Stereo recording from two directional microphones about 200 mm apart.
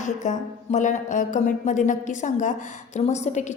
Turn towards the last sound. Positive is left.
turn(degrees=35)  # may be behind; listen again after turning